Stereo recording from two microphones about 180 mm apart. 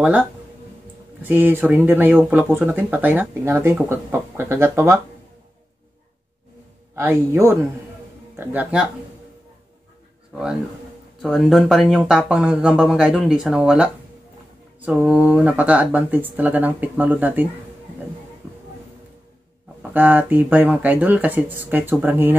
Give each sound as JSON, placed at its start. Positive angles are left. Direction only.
{"t": 1.2, "sound": "speech", "side_deg": -10}
{"t": 7.0, "sound": "speech", "side_deg": -15}
{"t": 11.2, "sound": "speech", "side_deg": 0}
{"t": 19.8, "sound": "speech", "side_deg": -10}